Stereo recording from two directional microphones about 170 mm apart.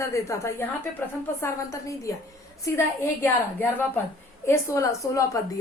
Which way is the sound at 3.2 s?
10° left (ahead or behind).